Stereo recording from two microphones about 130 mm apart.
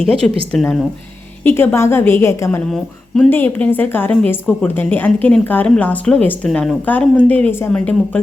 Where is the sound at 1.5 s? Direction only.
15° left (ahead or behind).